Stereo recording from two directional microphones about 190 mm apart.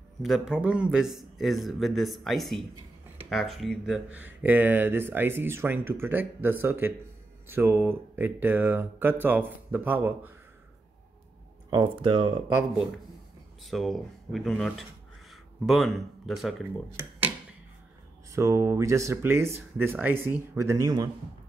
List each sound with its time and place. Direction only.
0.2 s a man's voice: 5° right (ahead or behind)
11.7 s speech: 25° right (ahead or behind)
12.5 s a man's voice: 5° right (ahead or behind)
18.3 s speech: 15° right (ahead or behind)